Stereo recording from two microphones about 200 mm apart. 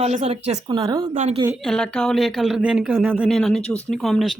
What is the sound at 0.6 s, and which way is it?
Speech, 20° right (ahead or behind).